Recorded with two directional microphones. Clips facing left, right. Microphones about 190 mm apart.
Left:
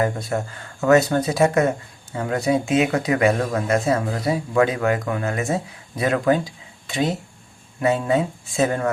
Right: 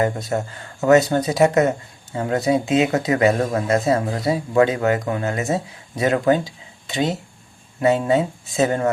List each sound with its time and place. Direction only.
0.0 s speech: 20° right (ahead or behind)